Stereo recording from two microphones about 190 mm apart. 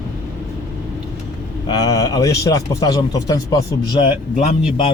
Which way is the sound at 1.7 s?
20° left (ahead or behind).